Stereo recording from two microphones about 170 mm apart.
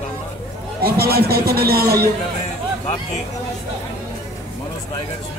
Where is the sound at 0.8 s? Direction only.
65° right (ahead or behind).